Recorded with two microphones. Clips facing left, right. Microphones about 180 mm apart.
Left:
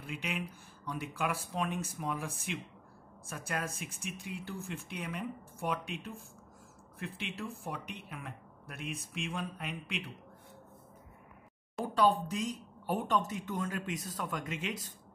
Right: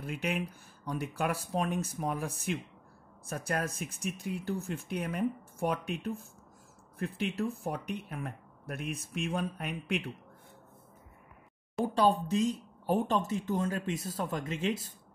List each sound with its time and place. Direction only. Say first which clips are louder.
0.0 s speech: right 5 dB; 45° right (ahead or behind)
11.8 s speech: right 2 dB; 30° right (ahead or behind)